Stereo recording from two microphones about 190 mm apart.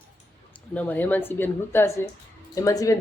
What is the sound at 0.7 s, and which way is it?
A woman's voice, 10° left (ahead or behind).